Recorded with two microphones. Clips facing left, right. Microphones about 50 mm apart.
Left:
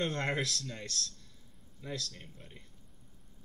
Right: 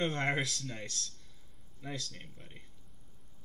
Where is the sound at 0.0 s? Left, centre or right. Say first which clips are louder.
Right 1 dB; centre.